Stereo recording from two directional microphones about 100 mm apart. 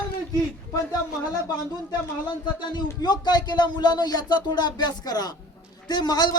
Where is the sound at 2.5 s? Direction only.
45° left (ahead or behind).